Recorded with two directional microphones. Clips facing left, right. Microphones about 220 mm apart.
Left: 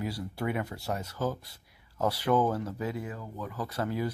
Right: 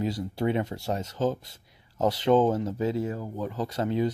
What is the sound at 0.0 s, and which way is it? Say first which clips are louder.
Speech: right 6 dB; 25° right (ahead or behind).